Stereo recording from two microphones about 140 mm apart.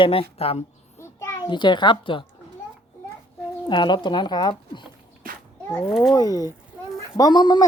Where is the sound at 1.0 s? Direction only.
20° left (ahead or behind).